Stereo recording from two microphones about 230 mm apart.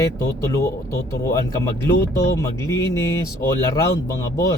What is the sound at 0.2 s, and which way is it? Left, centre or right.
Speech, centre.